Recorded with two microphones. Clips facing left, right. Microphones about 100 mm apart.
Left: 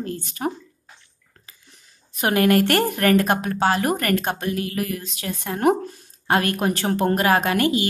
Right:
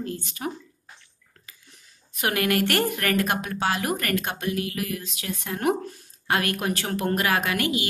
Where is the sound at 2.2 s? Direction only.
35° left (ahead or behind).